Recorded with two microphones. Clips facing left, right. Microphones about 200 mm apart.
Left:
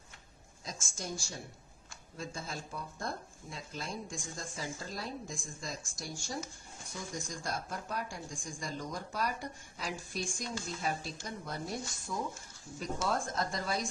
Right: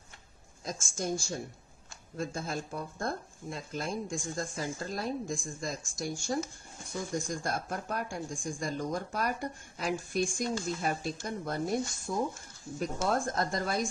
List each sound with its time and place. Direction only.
0.7 s speech: 50° right (ahead or behind)